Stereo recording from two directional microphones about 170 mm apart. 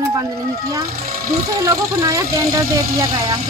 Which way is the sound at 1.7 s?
20° right (ahead or behind).